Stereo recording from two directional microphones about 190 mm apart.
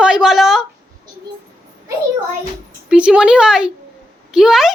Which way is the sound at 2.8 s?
5° right (ahead or behind).